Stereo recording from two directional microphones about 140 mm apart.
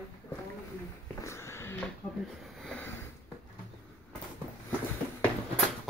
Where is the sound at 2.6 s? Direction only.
Centre (ahead or behind).